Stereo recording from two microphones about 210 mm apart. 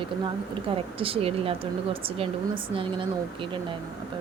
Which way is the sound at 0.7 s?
25° right (ahead or behind).